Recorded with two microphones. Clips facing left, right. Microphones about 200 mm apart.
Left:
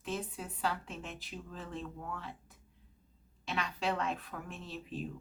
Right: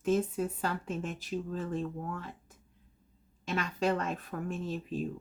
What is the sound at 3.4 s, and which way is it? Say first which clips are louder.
Speech: right 5 dB; 45° right (ahead or behind).